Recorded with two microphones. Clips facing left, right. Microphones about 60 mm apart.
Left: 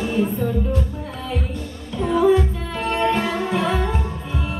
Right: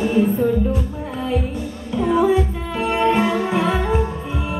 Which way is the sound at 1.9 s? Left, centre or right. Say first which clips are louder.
Even; centre.